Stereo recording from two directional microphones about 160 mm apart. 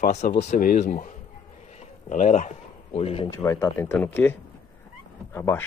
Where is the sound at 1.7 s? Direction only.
45° left (ahead or behind).